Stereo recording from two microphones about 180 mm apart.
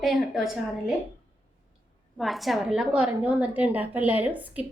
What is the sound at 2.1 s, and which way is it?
A woman's voice, centre (ahead or behind).